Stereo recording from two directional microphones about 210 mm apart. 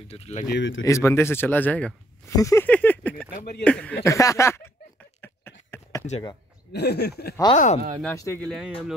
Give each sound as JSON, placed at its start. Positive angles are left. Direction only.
{"t": 0.1, "sound": "speech", "side_deg": 30}
{"t": 0.5, "sound": "speech", "side_deg": 60}
{"t": 0.8, "sound": "speech", "side_deg": 15}
{"t": 2.3, "sound": "a sound", "side_deg": 15}
{"t": 3.3, "sound": "speech", "side_deg": 50}
{"t": 3.6, "sound": "speech", "side_deg": 5}
{"t": 5.2, "sound": "a sound", "side_deg": 10}
{"t": 6.7, "sound": "speech", "side_deg": 50}
{"t": 7.5, "sound": "speech", "side_deg": 35}
{"t": 8.0, "sound": "speech", "side_deg": 15}
{"t": 8.5, "sound": "speech", "side_deg": 0}